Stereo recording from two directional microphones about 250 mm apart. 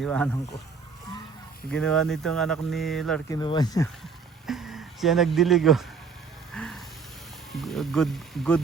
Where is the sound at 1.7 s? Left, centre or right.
Centre.